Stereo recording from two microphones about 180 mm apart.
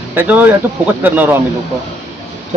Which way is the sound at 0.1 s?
10° right (ahead or behind).